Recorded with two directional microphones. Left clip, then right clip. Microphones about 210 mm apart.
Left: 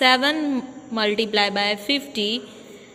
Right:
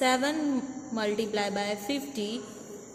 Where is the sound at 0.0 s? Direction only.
20° left (ahead or behind).